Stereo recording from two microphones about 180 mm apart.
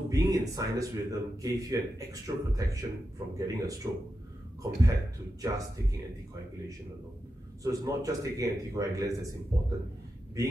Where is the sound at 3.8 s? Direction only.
25° right (ahead or behind).